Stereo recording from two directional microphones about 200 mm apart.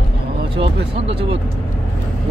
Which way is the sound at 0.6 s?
30° right (ahead or behind).